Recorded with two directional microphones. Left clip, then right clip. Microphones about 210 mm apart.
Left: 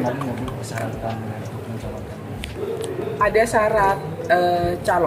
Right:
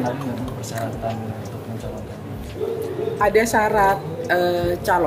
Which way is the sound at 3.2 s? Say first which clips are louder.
Even; 55° right (ahead or behind).